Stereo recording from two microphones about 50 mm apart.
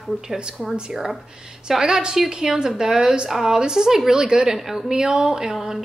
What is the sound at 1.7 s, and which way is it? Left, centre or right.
A woman's voice, centre.